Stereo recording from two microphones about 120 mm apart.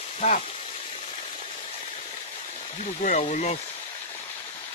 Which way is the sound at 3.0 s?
90° left.